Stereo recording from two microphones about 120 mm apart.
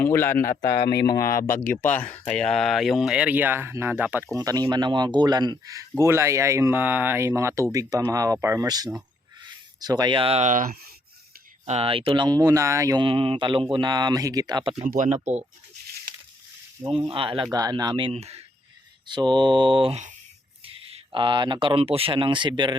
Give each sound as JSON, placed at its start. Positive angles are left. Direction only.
{"t": 0.0, "sound": "speech", "side_deg": 20}
{"t": 4.4, "sound": "speech", "side_deg": -30}
{"t": 8.6, "sound": "speech", "side_deg": -35}
{"t": 10.4, "sound": "speech", "side_deg": -90}
{"t": 11.6, "sound": "speech", "side_deg": -65}
{"t": 11.9, "sound": "speech", "side_deg": -45}
{"t": 13.0, "sound": "speech", "side_deg": -50}
{"t": 14.9, "sound": "speech", "side_deg": -90}
{"t": 17.1, "sound": "speech", "side_deg": -45}
{"t": 17.5, "sound": "speech", "side_deg": -35}
{"t": 18.1, "sound": "speech", "side_deg": -60}
{"t": 19.0, "sound": "speech", "side_deg": -40}